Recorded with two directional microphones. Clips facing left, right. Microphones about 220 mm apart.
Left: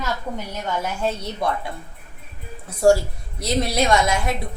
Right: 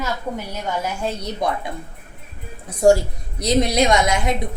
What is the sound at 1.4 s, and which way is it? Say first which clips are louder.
Speech: right 1 dB; 15° right (ahead or behind).